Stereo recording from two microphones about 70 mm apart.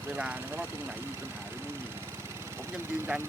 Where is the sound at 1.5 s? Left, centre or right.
Right.